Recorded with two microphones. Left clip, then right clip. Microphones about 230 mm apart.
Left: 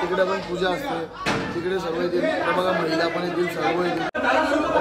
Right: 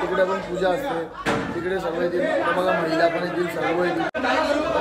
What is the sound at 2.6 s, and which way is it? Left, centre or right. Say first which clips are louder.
Speech: right 2 dB; centre.